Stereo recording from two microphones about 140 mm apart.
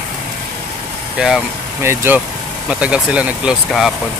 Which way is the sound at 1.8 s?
15° right (ahead or behind).